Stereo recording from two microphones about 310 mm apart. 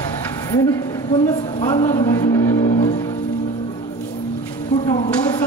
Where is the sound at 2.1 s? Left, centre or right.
Centre.